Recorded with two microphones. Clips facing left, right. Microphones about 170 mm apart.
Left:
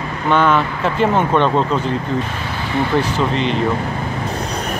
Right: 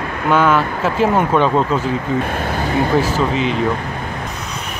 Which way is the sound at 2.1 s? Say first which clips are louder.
Right 3 dB; 55° right (ahead or behind).